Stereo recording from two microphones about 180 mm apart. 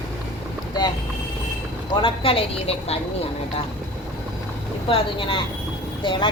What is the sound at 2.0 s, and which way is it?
Speech, 30° left (ahead or behind).